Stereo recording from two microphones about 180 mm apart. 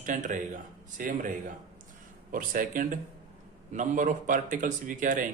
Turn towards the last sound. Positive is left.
turn(degrees=-45)  # may be behind; listen again after turning